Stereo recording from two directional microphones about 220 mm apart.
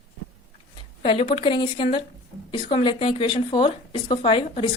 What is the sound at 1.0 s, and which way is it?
Speech, 25° left (ahead or behind).